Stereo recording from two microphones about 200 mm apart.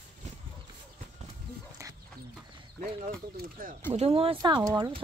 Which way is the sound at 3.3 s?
45° right (ahead or behind).